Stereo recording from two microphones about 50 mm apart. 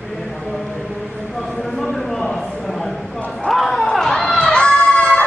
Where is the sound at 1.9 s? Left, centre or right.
Centre.